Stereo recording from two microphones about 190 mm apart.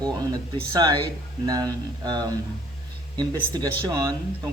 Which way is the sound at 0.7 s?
20° right (ahead or behind).